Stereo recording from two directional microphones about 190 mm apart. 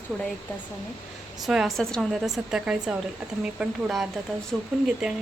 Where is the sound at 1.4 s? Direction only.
Centre (ahead or behind).